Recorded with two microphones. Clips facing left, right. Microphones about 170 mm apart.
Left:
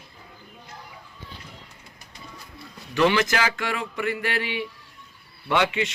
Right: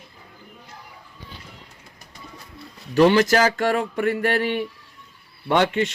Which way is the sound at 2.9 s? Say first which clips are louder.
Right 6 dB; 40° right (ahead or behind).